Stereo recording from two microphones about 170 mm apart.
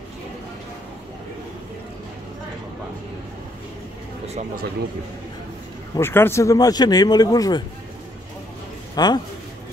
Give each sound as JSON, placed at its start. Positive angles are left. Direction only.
{"t": 5.9, "sound": "a man's voice", "side_deg": 15}
{"t": 8.9, "sound": "a man's voice", "side_deg": 25}